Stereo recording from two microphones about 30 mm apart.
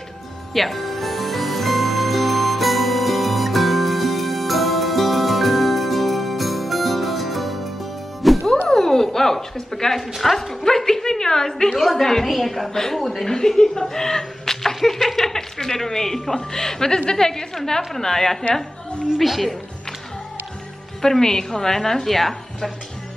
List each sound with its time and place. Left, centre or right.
0.6 s music: centre
8.5 s music: centre
9.9 s a woman's voice: centre
10.9 s a woman's voice: centre
12.7 s a woman's voice: centre
19.1 s a woman's voice: centre
21.0 s a woman's voice: centre